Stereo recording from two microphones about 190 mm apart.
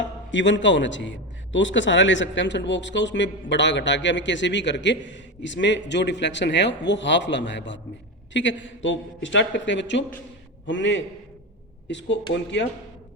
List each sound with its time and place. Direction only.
0.3 s a man's voice: 75° left (ahead or behind)